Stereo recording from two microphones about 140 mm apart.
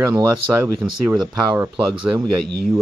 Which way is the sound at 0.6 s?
15° right (ahead or behind).